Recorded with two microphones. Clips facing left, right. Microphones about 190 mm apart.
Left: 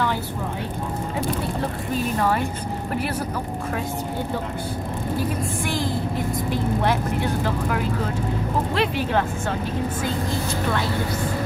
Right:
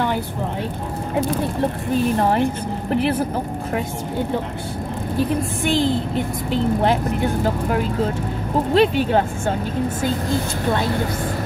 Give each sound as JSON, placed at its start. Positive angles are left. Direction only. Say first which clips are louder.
{"t": 2.1, "sound": "speech", "louder": "right 4 dB", "side_deg": -30}
{"t": 5.7, "sound": "a woman's voice", "louder": "right 9 dB", "side_deg": -25}
{"t": 7.4, "sound": "speech", "louder": "right 3 dB", "side_deg": -35}